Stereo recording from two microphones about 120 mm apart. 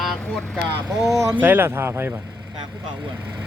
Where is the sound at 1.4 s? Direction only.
15° right (ahead or behind).